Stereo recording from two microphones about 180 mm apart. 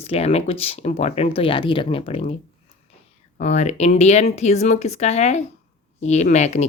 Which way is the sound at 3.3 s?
40° left (ahead or behind).